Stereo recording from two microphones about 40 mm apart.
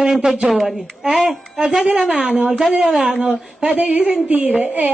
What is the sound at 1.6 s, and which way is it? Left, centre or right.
A woman's voice, centre.